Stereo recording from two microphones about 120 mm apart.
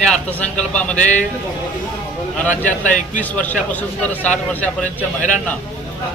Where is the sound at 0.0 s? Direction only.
10° left (ahead or behind).